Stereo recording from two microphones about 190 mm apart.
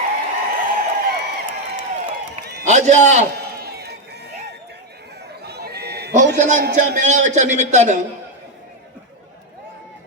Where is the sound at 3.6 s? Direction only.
55° right (ahead or behind).